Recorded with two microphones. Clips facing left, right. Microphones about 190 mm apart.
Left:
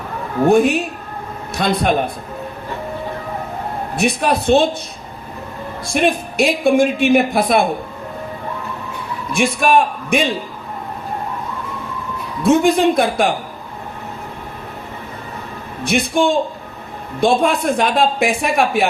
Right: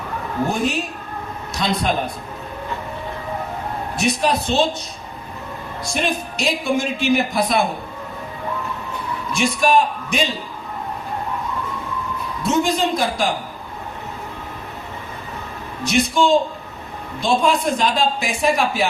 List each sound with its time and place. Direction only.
0.4 s a woman's voice: 60° left (ahead or behind)
3.9 s a woman's voice: 55° left (ahead or behind)
5.9 s a woman's voice: 55° left (ahead or behind)
9.6 s a man's voice: 60° left (ahead or behind)
12.4 s a woman's voice: 55° left (ahead or behind)
15.8 s a woman's voice: 55° left (ahead or behind)